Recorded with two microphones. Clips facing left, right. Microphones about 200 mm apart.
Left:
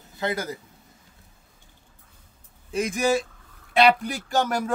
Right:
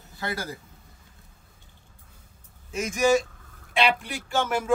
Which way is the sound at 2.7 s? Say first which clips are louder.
Right 1 dB; 35° left (ahead or behind).